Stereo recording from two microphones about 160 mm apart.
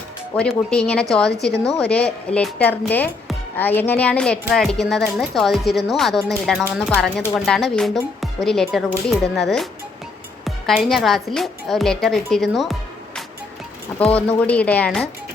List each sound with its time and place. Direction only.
0.3 s speech: 5° left (ahead or behind)
14.0 s speech: 10° left (ahead or behind)